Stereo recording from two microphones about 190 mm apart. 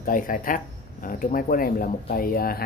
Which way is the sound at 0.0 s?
45° left (ahead or behind).